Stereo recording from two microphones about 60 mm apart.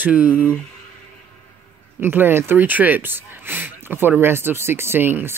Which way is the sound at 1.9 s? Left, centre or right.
Right.